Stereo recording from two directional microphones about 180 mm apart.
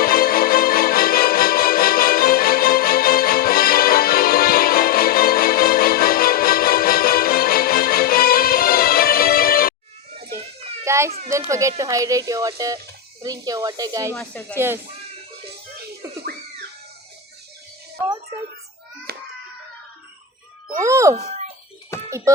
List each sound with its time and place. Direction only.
0.0 s music: 55° left (ahead or behind)
10.8 s children playing: 15° right (ahead or behind)
11.3 s speech: 15° right (ahead or behind)
19.1 s a sound: 60° right (ahead or behind)
20.8 s speech: 15° right (ahead or behind)
21.9 s music: 15° left (ahead or behind)